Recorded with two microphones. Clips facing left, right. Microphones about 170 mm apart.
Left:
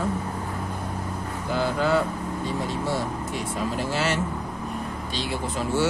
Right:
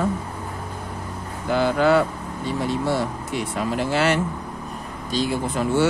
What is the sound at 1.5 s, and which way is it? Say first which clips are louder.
Vehicle: right 5 dB; 70° right (ahead or behind).